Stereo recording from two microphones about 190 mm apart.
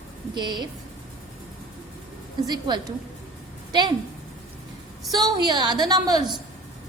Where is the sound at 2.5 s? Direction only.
25° right (ahead or behind).